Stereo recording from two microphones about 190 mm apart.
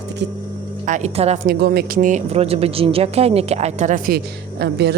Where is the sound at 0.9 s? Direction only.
35° right (ahead or behind).